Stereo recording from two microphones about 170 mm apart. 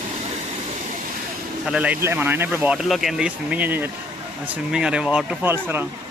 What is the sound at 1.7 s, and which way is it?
Speech, 5° right (ahead or behind).